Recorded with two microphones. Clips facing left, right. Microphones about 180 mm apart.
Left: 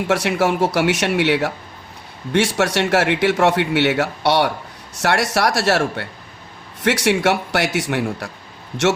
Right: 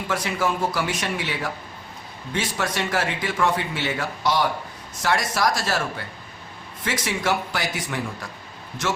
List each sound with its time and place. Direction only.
0.1 s speech: 70° left (ahead or behind)
6.8 s speech: 75° left (ahead or behind)